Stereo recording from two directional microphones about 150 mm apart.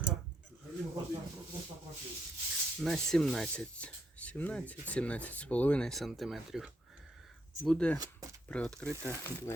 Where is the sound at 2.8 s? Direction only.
Centre (ahead or behind).